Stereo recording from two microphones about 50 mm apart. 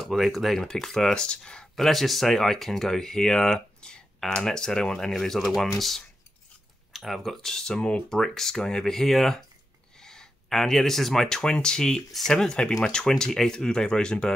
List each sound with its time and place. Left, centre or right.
0.0 s speech: centre
1.8 s speech: centre